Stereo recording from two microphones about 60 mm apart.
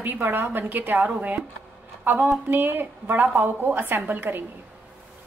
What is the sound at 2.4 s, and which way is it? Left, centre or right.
A woman's voice, right.